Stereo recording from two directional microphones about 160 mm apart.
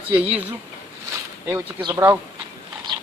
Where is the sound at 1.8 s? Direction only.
15° right (ahead or behind).